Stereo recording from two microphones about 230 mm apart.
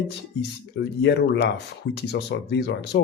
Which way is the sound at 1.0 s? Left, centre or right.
Left.